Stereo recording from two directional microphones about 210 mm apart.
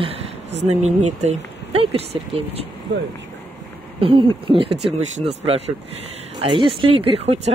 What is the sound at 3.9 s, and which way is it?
Speech, 25° right (ahead or behind).